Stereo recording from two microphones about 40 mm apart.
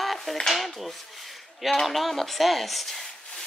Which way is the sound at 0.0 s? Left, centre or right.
Centre.